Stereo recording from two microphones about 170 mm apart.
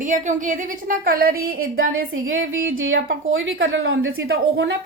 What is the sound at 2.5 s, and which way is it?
Speech, 55° right (ahead or behind).